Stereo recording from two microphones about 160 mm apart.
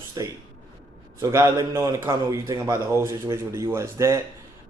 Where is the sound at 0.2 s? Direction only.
20° right (ahead or behind).